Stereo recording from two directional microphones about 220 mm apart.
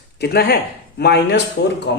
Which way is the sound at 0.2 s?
45° left (ahead or behind).